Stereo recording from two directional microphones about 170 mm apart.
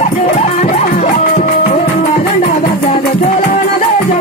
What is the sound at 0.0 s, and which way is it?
Music, 40° left (ahead or behind).